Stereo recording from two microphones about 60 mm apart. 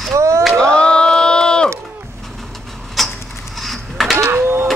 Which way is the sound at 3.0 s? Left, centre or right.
Centre.